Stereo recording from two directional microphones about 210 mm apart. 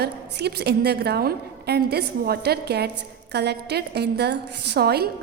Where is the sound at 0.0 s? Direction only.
50° right (ahead or behind).